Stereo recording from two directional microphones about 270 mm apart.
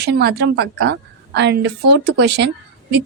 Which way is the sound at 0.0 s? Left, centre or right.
Right.